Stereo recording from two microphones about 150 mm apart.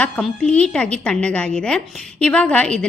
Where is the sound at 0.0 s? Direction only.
5° left (ahead or behind).